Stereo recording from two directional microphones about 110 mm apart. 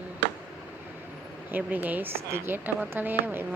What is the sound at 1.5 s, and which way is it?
Speech, 15° right (ahead or behind).